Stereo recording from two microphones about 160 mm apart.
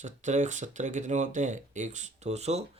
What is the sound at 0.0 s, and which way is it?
Speech, 50° right (ahead or behind).